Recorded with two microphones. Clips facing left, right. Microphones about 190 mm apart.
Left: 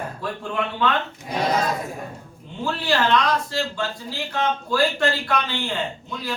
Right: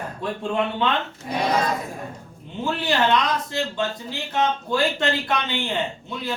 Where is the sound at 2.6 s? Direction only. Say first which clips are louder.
Even; 20° right (ahead or behind).